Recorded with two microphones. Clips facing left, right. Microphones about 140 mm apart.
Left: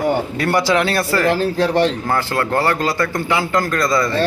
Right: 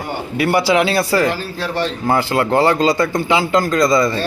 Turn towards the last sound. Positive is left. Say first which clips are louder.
# right 3 dB
turn(degrees=-15)  # may be behind; listen again after turning